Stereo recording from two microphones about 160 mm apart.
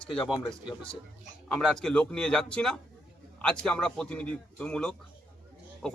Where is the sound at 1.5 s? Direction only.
5° left (ahead or behind).